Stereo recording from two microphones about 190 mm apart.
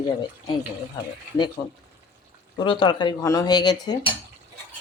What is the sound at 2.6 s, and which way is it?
Speech, 25° left (ahead or behind).